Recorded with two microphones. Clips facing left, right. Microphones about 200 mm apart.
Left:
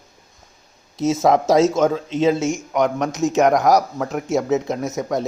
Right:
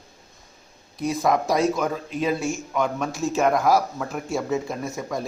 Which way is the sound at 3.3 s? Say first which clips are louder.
Left 5 dB; 85° left.